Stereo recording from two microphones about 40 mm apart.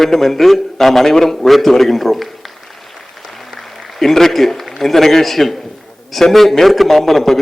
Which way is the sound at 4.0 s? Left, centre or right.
Centre.